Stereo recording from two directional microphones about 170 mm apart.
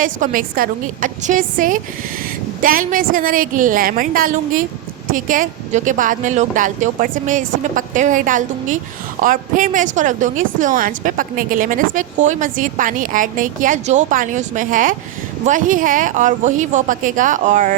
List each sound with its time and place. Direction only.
0.0 s a woman's voice: 55° right (ahead or behind)